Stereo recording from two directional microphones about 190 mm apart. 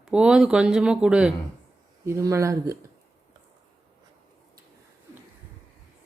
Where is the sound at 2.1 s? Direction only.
15° right (ahead or behind).